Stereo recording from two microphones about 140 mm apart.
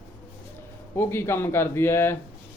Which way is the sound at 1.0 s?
15° left (ahead or behind).